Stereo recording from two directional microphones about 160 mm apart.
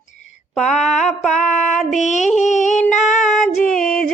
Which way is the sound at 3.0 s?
Centre (ahead or behind).